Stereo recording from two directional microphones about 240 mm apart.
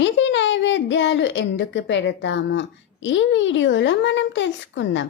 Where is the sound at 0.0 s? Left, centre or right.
Left.